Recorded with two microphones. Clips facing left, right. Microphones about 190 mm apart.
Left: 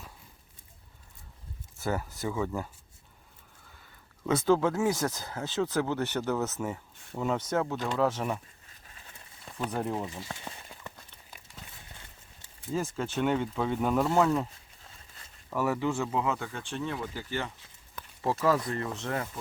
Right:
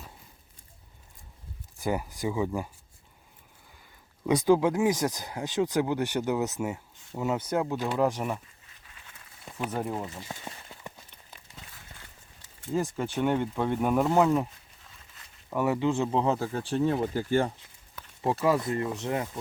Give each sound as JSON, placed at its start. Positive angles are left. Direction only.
{"t": 1.8, "sound": "speech", "side_deg": -15}
{"t": 4.3, "sound": "speech", "side_deg": -15}
{"t": 9.6, "sound": "speech", "side_deg": -5}
{"t": 10.2, "sound": "a sound", "side_deg": -15}
{"t": 12.7, "sound": "speech", "side_deg": -15}
{"t": 15.4, "sound": "speech", "side_deg": -15}
{"t": 16.0, "sound": "speech", "side_deg": -30}
{"t": 18.2, "sound": "speech", "side_deg": -15}